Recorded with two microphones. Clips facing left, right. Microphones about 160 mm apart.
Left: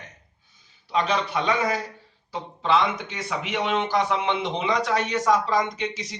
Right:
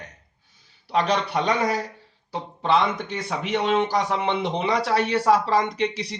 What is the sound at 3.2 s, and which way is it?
Speech, 30° right (ahead or behind).